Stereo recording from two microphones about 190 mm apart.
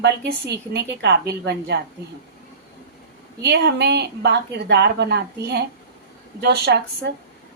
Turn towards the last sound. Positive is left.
turn(degrees=-60)  # may be behind; listen again after turning